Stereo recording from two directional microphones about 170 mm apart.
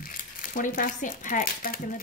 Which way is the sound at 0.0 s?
55° left (ahead or behind).